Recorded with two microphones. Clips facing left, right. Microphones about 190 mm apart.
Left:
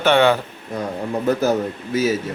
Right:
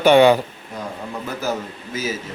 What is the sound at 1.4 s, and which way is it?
Speech, 65° left (ahead or behind).